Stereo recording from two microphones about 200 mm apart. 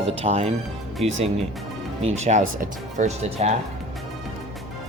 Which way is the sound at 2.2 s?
35° right (ahead or behind).